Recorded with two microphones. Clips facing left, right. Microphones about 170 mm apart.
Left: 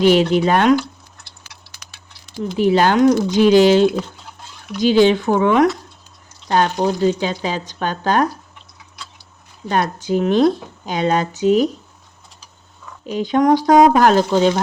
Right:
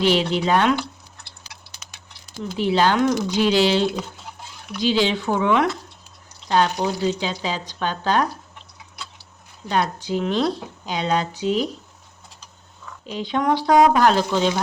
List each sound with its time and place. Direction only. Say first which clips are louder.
0.0 s speech: left 6 dB; 45° left (ahead or behind)
2.6 s speech: left 5 dB; 45° left (ahead or behind)
9.6 s speech: left 3 dB; 50° left (ahead or behind)
13.1 s speech: left 7 dB; 45° left (ahead or behind)